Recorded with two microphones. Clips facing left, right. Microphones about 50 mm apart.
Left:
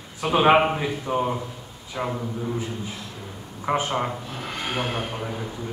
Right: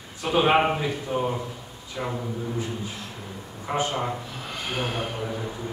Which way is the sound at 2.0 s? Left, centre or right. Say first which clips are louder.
Left 3 dB; left.